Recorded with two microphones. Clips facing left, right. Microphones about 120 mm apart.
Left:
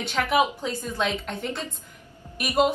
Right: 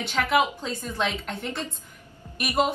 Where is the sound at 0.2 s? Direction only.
15° left (ahead or behind).